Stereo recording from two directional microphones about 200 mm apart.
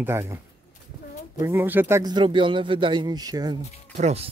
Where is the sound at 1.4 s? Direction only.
10° right (ahead or behind).